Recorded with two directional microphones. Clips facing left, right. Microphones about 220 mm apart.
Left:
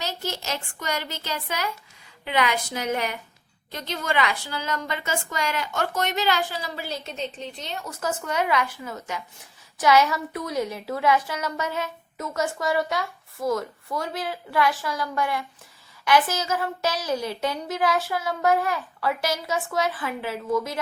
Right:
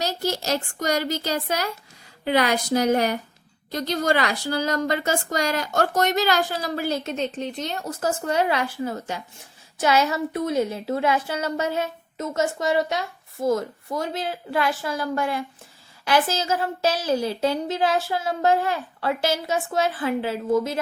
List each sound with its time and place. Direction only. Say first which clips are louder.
0.0 s a woman's voice: right 6 dB; 35° right (ahead or behind)